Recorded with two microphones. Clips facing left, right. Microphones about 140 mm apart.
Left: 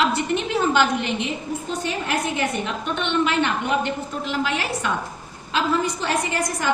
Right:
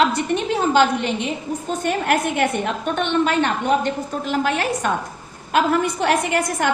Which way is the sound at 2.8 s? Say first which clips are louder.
Right 2 dB; 45° right (ahead or behind).